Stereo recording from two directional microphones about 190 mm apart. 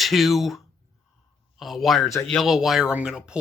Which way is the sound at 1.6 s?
Centre (ahead or behind).